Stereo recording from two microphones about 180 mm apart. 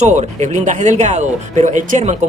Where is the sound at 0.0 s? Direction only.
40° right (ahead or behind).